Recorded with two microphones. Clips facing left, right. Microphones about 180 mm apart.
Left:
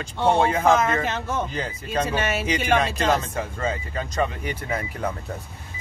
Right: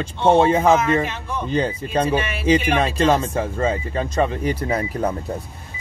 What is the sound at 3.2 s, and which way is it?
Speech, 30° right (ahead or behind).